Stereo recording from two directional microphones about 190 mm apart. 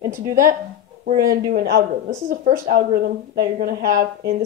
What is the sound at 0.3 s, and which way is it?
Speech, 45° right (ahead or behind).